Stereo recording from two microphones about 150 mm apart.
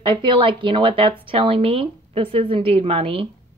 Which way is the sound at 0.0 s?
30° right (ahead or behind).